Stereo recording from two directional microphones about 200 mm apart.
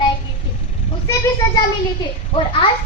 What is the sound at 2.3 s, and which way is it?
Speech, 25° left (ahead or behind).